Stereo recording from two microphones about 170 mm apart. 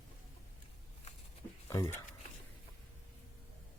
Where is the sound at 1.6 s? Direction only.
20° left (ahead or behind).